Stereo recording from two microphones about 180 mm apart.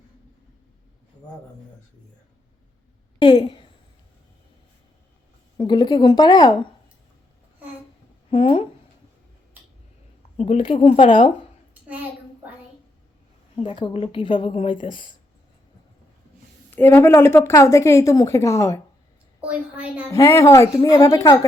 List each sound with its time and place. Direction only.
3.2 s a sound: 25° left (ahead or behind)
5.5 s a woman's voice: 25° left (ahead or behind)
8.3 s speech: 30° left (ahead or behind)
10.3 s speech: 35° left (ahead or behind)
13.6 s a woman's voice: 25° left (ahead or behind)
16.7 s a woman's voice: 10° left (ahead or behind)
19.4 s a woman's voice: 5° right (ahead or behind)
20.1 s a woman's voice: 15° left (ahead or behind)